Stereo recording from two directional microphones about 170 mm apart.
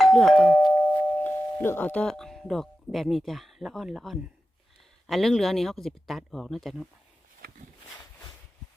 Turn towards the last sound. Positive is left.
turn(degrees=0)  # may be behind; listen again after turning